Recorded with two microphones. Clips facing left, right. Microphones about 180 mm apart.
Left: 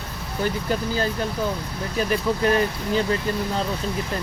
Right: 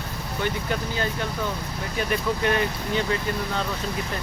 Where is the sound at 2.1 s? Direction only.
35° left (ahead or behind).